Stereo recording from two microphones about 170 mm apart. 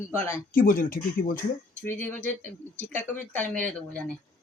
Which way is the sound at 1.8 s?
10° left (ahead or behind).